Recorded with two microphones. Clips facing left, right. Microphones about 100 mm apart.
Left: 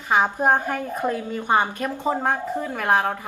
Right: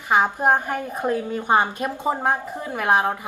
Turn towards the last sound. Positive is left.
turn(degrees=-15)  # may be behind; listen again after turning